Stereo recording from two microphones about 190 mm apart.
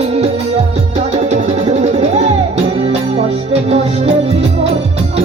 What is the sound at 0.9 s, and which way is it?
Music, 35° right (ahead or behind).